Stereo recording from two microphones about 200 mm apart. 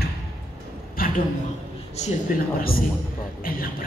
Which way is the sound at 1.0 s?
45° left (ahead or behind).